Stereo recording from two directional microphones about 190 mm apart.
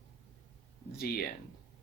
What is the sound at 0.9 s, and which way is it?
Speech, 55° left (ahead or behind).